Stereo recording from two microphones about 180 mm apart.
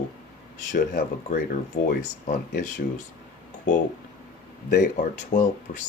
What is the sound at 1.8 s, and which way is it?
Speech, 50° left (ahead or behind).